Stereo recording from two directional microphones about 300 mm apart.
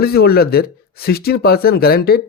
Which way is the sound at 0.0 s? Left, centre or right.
Left.